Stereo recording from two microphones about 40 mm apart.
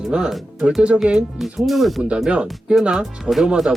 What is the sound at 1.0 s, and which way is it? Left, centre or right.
Speech, right.